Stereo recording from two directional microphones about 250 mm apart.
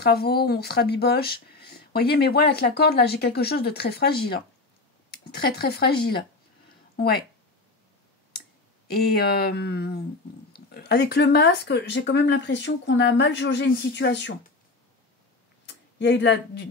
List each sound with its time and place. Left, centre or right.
0.0 s speech: left
8.8 s speech: left
15.6 s speech: left